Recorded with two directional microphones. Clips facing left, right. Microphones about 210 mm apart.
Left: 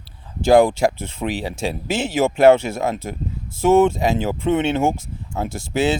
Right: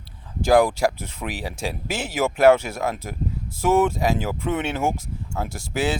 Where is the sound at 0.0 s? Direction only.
25° left (ahead or behind).